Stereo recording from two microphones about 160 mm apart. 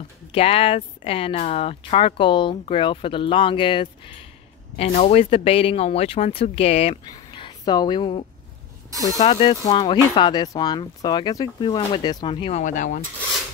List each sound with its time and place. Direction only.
0.3 s speech: 40° left (ahead or behind)
12.6 s speech: 55° left (ahead or behind)